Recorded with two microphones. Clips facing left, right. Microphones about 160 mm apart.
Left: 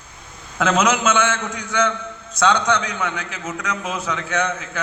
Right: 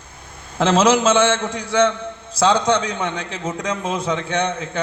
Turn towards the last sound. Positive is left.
turn(degrees=-30)  # may be behind; listen again after turning